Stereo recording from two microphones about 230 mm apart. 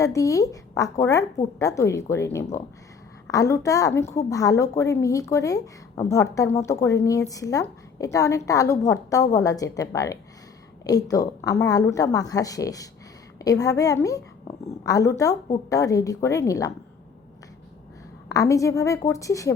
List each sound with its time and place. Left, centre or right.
0.0 s a woman's voice: centre
14.5 s a sound: centre
14.8 s a woman's voice: centre
18.3 s a woman's voice: centre